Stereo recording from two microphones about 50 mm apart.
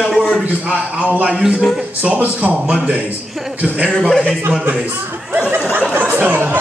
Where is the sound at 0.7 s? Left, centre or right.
Right.